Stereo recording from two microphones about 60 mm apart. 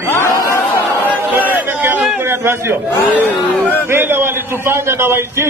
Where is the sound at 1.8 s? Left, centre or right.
Right.